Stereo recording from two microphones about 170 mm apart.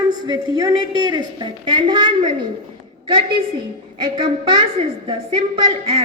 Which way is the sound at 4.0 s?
30° right (ahead or behind).